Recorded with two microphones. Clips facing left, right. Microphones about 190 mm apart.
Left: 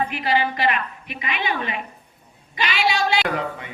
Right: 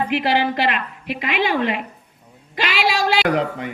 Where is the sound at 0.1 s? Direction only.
75° right (ahead or behind).